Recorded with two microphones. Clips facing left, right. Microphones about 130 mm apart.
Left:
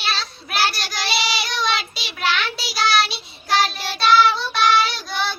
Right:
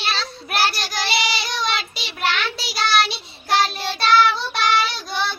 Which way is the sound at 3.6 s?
5° left (ahead or behind).